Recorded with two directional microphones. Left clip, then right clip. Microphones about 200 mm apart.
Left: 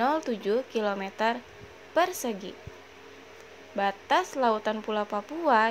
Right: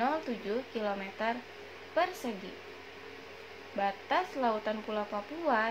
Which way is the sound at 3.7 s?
50° left (ahead or behind).